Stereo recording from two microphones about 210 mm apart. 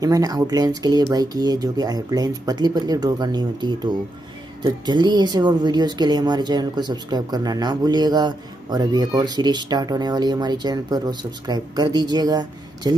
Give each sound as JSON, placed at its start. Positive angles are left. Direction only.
{"t": 0.0, "sound": "speech", "side_deg": -15}